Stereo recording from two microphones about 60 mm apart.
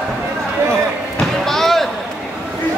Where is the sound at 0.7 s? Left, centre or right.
Centre.